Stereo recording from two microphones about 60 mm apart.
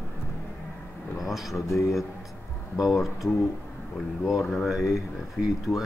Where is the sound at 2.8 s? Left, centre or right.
Centre.